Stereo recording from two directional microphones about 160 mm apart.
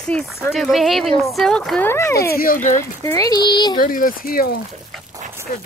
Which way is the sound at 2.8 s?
20° left (ahead or behind).